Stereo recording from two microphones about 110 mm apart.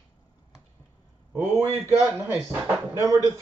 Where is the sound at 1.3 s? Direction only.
20° right (ahead or behind).